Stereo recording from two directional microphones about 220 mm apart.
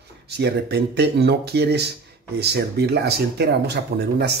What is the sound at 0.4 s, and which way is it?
Speech, 50° right (ahead or behind).